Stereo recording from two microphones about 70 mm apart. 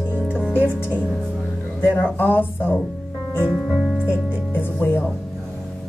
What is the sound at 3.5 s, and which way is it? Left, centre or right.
Music, centre.